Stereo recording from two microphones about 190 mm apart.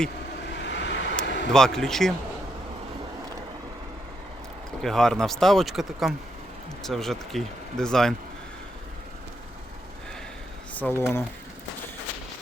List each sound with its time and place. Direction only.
0.5 s vehicle: 70° left (ahead or behind)
1.2 s a sound: 70° left (ahead or behind)
1.5 s speech: 5° left (ahead or behind)
4.8 s speech: centre (ahead or behind)
10.8 s speech: 10° left (ahead or behind)